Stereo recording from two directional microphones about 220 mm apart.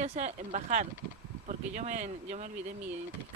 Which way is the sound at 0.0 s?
30° right (ahead or behind).